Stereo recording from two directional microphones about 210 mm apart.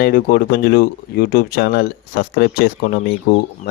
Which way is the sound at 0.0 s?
45° left (ahead or behind).